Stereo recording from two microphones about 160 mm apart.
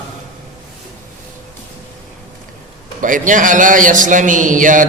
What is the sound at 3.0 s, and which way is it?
A man's voice, 55° right (ahead or behind).